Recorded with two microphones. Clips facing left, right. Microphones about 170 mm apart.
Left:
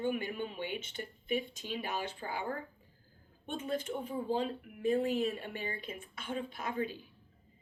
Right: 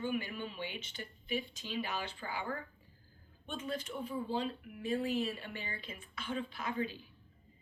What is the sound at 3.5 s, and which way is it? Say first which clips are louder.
Speech: left 4 dB; 50° left (ahead or behind).